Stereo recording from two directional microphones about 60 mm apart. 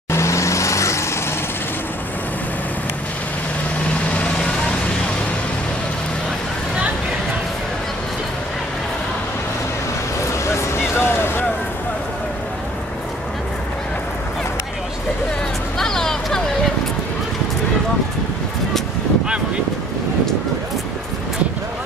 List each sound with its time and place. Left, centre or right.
0.1 s vehicle: left
10.5 s vehicle: left
15.8 s hubbub: centre